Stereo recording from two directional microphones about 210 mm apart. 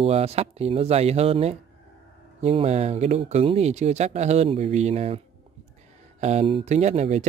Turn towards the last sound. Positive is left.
turn(degrees=-30)  # may be behind; listen again after turning